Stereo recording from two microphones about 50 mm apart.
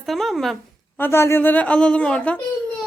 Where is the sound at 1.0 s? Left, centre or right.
Left.